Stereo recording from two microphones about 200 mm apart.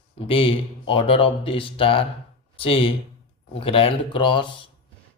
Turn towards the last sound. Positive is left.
turn(degrees=25)  # may be behind; listen again after turning